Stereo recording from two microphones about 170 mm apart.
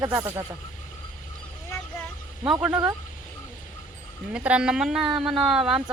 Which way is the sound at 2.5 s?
5° right (ahead or behind).